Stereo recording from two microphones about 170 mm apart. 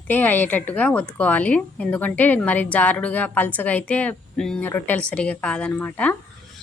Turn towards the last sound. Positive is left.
turn(degrees=10)  # may be behind; listen again after turning